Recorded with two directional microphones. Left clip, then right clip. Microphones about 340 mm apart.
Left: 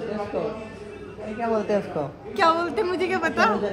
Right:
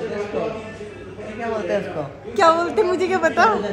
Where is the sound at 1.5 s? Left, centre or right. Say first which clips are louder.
Right 1 dB; left.